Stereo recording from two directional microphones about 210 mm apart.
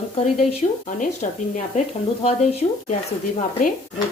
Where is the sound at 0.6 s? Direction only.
25° left (ahead or behind).